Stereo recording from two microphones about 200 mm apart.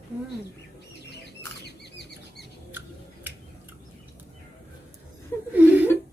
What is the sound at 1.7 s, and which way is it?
Rodents, 55° left (ahead or behind).